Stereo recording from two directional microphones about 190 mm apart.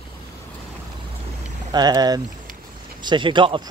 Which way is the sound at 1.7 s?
20° right (ahead or behind).